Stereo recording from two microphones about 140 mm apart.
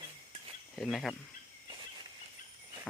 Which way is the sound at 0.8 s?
Centre (ahead or behind).